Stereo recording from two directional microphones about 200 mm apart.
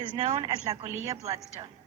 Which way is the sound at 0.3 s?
20° right (ahead or behind).